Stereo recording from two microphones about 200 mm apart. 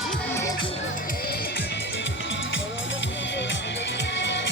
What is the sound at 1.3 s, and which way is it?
Music, 50° left (ahead or behind).